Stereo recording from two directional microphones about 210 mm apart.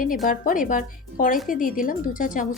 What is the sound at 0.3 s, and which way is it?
Speech, 40° left (ahead or behind).